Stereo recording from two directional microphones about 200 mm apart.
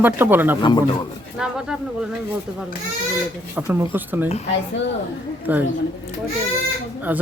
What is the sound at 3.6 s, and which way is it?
Speech, 15° right (ahead or behind).